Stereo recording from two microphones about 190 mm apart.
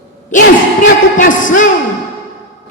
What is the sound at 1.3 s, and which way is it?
Speech, 45° left (ahead or behind).